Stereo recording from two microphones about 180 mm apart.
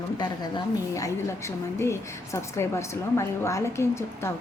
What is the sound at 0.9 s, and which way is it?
A woman's voice, 15° left (ahead or behind).